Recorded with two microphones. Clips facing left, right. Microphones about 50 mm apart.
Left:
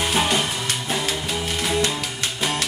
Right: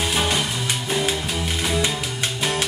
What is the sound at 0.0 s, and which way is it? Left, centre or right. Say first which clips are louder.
Music: left 1 dB; centre.